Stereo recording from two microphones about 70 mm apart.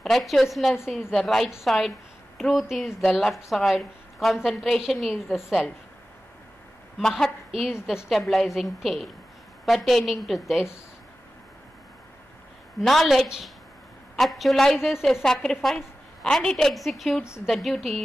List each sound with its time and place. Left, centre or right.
0.0 s a woman's voice: centre
7.0 s a woman's voice: centre
8.1 s a woman's voice: centre
12.8 s a woman's voice: centre
15.0 s a woman's voice: centre